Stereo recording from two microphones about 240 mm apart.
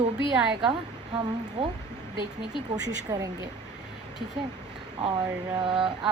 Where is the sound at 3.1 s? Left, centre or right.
Centre.